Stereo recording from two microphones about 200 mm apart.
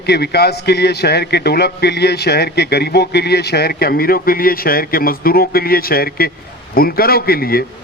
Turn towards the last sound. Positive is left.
turn(degrees=50)  # may be behind; listen again after turning